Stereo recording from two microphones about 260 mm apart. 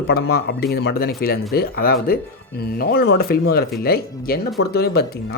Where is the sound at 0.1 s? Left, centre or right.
Left.